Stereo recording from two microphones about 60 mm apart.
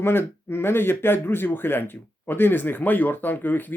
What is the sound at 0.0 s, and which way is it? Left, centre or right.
Speech, left.